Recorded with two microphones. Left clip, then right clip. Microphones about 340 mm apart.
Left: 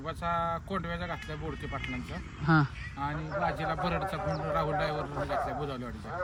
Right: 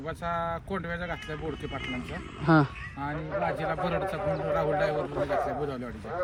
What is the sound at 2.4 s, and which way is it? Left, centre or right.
Speech, centre.